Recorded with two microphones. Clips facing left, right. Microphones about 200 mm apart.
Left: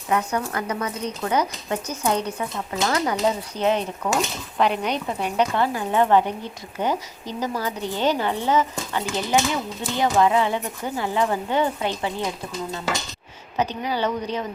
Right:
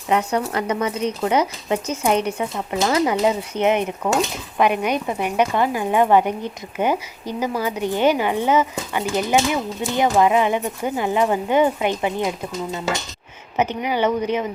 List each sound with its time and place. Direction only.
0.1 s speech: 25° right (ahead or behind)
13.6 s speech: 20° right (ahead or behind)